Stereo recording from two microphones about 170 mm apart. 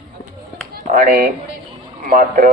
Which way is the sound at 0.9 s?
60° right (ahead or behind).